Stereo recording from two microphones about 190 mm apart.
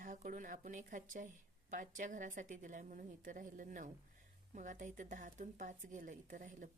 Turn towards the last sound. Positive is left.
turn(degrees=-45)  # may be behind; listen again after turning